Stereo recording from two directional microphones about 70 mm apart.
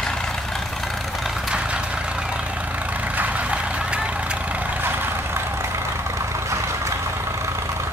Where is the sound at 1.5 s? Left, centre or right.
Centre.